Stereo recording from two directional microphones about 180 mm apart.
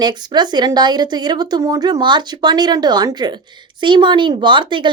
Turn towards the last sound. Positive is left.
turn(degrees=-25)  # may be behind; listen again after turning